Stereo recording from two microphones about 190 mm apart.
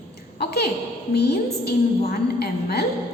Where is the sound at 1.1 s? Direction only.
55° left (ahead or behind).